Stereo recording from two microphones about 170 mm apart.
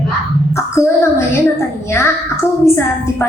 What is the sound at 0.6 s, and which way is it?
Child singing, 15° left (ahead or behind).